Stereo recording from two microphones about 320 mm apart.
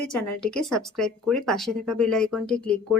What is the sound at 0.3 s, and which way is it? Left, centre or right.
Speech, centre.